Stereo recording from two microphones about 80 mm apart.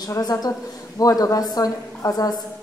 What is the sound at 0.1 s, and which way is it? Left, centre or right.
A woman's voice, left.